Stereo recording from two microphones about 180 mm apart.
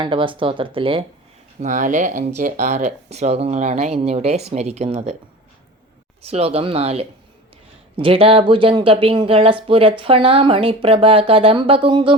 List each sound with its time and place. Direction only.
0.0 s speech: 25° right (ahead or behind)
1.6 s speech: 45° right (ahead or behind)
6.2 s speech: 35° right (ahead or behind)